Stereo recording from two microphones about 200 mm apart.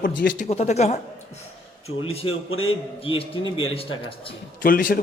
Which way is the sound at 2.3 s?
90° left.